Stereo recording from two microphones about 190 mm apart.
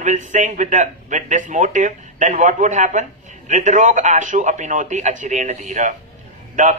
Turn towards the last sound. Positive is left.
turn(degrees=-40)  # may be behind; listen again after turning